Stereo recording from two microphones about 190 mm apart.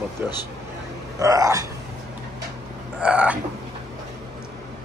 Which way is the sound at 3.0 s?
5° right (ahead or behind).